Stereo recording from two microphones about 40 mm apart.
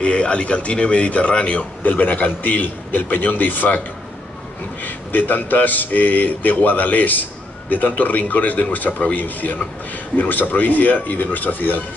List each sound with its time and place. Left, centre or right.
0.0 s a man's voice: left
1.8 s speech: left
4.8 s speech: left